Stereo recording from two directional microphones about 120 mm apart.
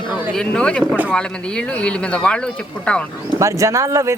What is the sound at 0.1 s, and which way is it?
Speech, 5° left (ahead or behind).